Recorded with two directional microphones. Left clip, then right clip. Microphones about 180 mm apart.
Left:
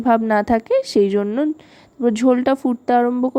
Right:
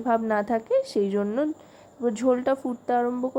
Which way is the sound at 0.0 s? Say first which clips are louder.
Left 7 dB; 40° left (ahead or behind).